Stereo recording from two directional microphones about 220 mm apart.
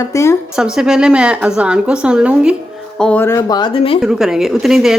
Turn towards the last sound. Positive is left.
turn(degrees=0)  # may be behind; listen again after turning